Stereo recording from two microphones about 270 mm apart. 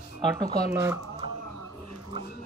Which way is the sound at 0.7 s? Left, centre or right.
Centre.